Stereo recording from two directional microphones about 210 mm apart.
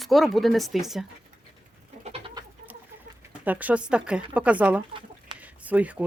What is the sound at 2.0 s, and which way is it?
Goat, 25° right (ahead or behind).